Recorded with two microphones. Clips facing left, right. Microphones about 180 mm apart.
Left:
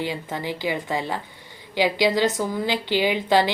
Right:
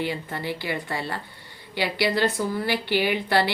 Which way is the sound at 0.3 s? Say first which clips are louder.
Left 3 dB; 15° left (ahead or behind).